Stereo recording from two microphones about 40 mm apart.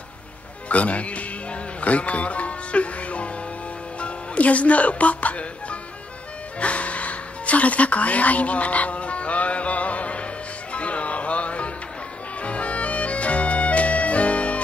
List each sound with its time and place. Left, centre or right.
0.7 s music: left